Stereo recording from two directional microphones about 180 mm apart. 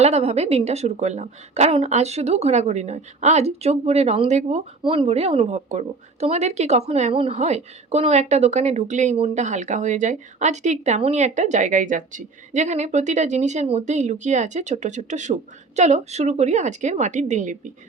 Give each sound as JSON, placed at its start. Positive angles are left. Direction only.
{"t": 0.0, "sound": "a woman's voice", "side_deg": -35}